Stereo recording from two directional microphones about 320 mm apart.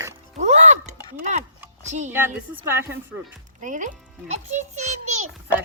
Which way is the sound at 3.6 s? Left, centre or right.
Right.